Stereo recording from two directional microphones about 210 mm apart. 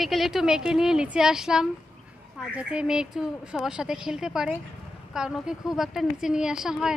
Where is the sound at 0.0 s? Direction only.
Centre (ahead or behind).